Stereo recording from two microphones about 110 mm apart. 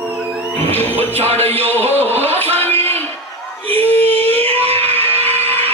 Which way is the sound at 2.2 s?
20° left (ahead or behind).